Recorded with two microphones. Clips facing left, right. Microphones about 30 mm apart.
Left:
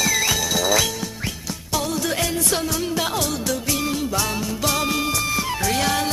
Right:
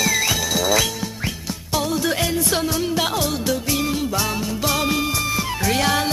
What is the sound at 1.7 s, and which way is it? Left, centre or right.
Music, centre.